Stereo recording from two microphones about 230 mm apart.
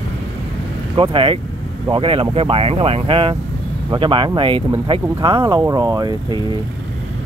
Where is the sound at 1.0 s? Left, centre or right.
Right.